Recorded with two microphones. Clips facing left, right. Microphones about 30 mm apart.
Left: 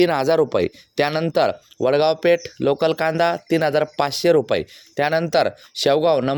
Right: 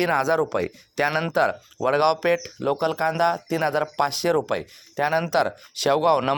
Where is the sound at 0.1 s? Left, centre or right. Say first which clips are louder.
Left 4 dB; left.